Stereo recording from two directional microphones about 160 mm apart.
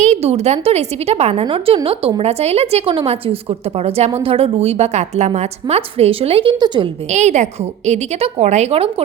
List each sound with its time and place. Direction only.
0.0 s a woman's voice: 45° right (ahead or behind)
7.1 s a woman's voice: 45° right (ahead or behind)